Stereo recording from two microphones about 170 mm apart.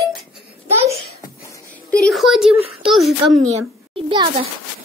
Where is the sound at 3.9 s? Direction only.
30° right (ahead or behind).